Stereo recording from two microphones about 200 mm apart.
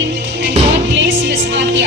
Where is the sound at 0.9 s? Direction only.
70° right (ahead or behind).